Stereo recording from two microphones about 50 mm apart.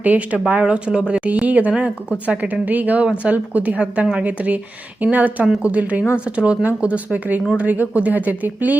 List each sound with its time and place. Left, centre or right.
0.0 s speech: right